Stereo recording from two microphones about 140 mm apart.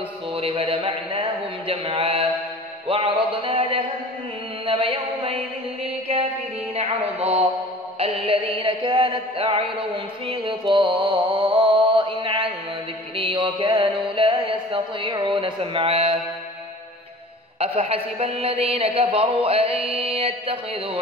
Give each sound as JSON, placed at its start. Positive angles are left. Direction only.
{"t": 0.3, "sound": "a sound", "side_deg": -40}
{"t": 2.9, "sound": "music", "side_deg": -40}
{"t": 4.6, "sound": "mantra", "side_deg": -40}
{"t": 6.1, "sound": "speech", "side_deg": -50}
{"t": 8.0, "sound": "music", "side_deg": -40}
{"t": 17.6, "sound": "speech", "side_deg": -45}